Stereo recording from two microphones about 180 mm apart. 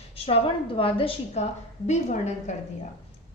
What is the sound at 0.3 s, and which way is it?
A woman's voice, 30° left (ahead or behind).